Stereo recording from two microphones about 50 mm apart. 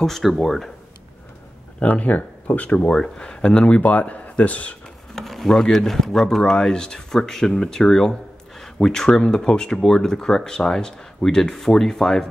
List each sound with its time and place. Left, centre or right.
0.0 s speech: centre
1.8 s speech: left
2.9 s speech: centre
5.1 s speech: centre